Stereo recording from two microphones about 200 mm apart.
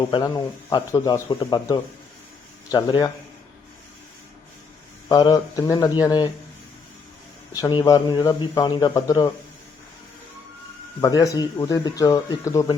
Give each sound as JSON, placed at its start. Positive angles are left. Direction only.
{"t": 0.1, "sound": "a man's voice", "side_deg": 20}
{"t": 5.0, "sound": "a man's voice", "side_deg": 20}
{"t": 7.5, "sound": "a man's voice", "side_deg": 20}
{"t": 11.0, "sound": "speech", "side_deg": 15}